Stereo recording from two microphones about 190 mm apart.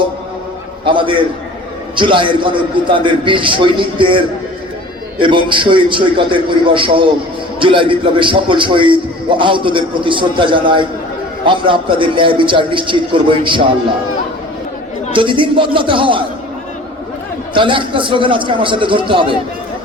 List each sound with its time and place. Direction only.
0.9 s a man's voice: 25° right (ahead or behind)
5.2 s a man's voice: 25° right (ahead or behind)
15.1 s a man's voice: 25° right (ahead or behind)
17.5 s a man's voice: 25° right (ahead or behind)